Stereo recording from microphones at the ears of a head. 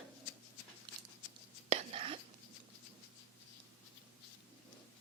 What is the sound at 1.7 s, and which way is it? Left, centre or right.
Whispering, right.